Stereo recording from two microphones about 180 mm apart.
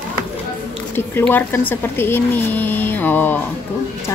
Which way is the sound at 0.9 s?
10° left (ahead or behind).